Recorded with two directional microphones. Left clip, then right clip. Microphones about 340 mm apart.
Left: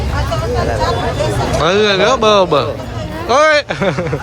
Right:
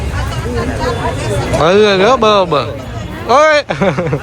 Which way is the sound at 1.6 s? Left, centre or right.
Centre.